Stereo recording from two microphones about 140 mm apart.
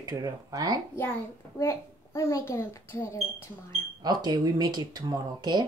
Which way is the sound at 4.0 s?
30° right (ahead or behind).